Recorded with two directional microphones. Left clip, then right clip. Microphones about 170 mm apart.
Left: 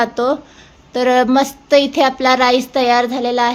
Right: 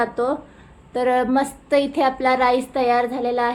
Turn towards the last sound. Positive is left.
turn(degrees=30)  # may be behind; listen again after turning